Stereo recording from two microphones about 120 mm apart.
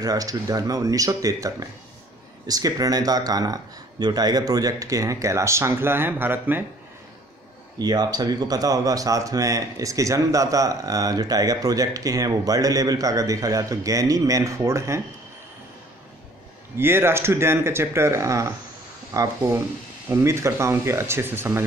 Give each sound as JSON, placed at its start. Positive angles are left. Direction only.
{"t": 0.0, "sound": "speech", "side_deg": -30}
{"t": 7.8, "sound": "speech", "side_deg": -35}
{"t": 16.7, "sound": "speech", "side_deg": -20}